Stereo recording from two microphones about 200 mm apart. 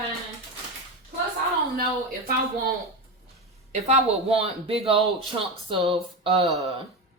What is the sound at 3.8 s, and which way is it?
Speech, 30° right (ahead or behind).